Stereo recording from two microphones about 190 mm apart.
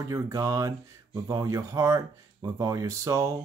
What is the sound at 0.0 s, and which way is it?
Speech, 15° right (ahead or behind).